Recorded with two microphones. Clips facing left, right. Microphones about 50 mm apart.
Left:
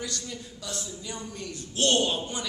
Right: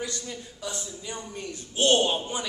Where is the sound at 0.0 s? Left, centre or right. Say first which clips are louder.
Right 2 dB; centre.